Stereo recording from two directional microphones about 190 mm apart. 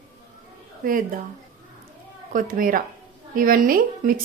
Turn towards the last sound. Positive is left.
turn(degrees=-50)  # may be behind; listen again after turning